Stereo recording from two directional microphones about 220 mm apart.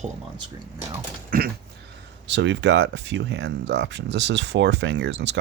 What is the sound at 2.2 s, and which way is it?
Speech, 55° right (ahead or behind).